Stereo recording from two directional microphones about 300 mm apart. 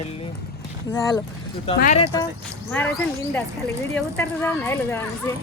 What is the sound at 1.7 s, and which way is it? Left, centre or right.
Speech, left.